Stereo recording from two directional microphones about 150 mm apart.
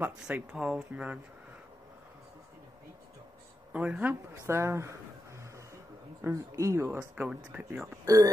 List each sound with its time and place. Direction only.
0.0 s speech: 10° right (ahead or behind)
3.7 s speech: 10° right (ahead or behind)
6.2 s speech: 20° right (ahead or behind)